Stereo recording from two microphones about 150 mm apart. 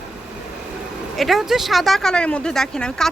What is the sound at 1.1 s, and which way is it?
Speech, centre (ahead or behind).